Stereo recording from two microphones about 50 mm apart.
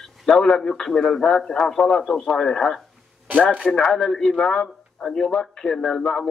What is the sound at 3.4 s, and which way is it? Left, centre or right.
Speech, left.